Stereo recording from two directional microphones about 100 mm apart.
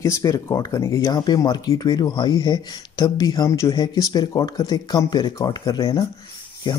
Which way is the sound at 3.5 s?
30° left (ahead or behind).